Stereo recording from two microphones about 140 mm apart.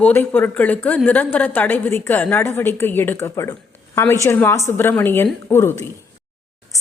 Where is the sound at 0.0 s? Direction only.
15° left (ahead or behind).